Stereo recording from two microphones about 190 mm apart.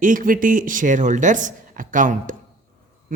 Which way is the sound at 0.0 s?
45° right (ahead or behind).